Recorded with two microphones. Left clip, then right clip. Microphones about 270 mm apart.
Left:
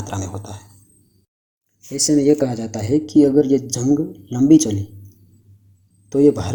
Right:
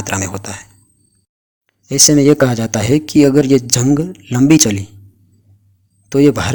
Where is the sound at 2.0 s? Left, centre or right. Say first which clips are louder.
Right 4 dB; right.